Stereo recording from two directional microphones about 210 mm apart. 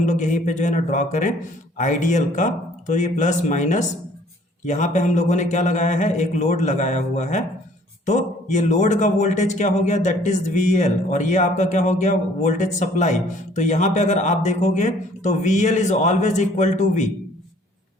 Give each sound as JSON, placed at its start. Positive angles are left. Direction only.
{"t": 0.0, "sound": "speech", "side_deg": 35}